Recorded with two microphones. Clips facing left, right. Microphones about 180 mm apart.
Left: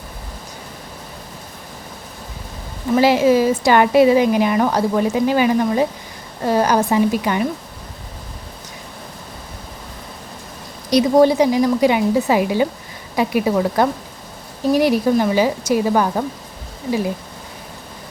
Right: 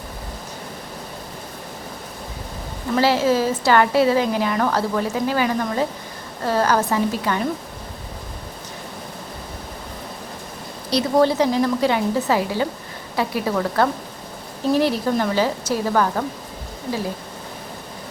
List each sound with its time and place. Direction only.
2.9 s a woman's voice: 15° left (ahead or behind)
10.8 s a woman's voice: 15° left (ahead or behind)